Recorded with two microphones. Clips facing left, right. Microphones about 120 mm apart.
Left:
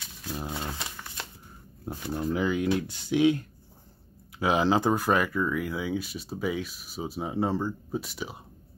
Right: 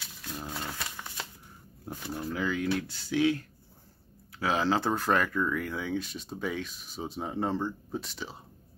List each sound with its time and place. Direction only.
0.0 s a sound: 5° left (ahead or behind)
0.5 s speech: 10° left (ahead or behind)
2.1 s speech: 20° left (ahead or behind)